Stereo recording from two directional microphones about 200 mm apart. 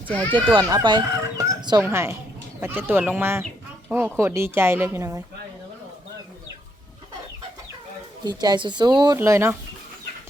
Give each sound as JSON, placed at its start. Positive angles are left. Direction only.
{"t": 0.1, "sound": "speech", "side_deg": 10}
{"t": 0.3, "sound": "speech", "side_deg": -25}
{"t": 8.2, "sound": "speech", "side_deg": -20}